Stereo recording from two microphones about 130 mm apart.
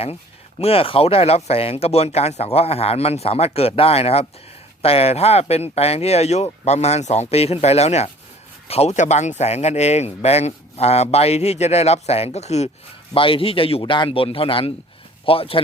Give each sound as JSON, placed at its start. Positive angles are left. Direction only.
{"t": 0.6, "sound": "speech", "side_deg": 45}
{"t": 13.1, "sound": "speech", "side_deg": 45}